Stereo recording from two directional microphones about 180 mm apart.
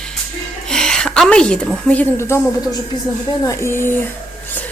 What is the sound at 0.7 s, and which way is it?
A woman's voice, 5° left (ahead or behind).